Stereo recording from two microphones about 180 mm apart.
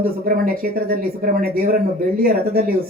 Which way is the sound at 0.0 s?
55° right (ahead or behind).